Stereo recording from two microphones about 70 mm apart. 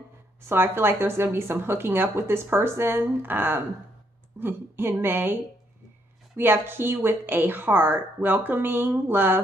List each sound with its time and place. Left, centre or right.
0.4 s speech: right